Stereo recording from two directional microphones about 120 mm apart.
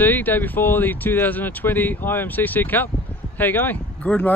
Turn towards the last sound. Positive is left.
turn(degrees=10)  # may be behind; listen again after turning